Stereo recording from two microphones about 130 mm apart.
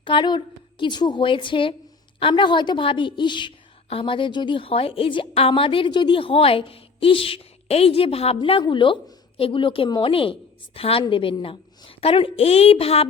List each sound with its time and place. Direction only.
0.0 s a woman's voice: 40° left (ahead or behind)